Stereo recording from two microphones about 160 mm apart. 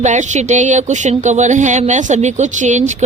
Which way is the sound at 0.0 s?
50° right (ahead or behind).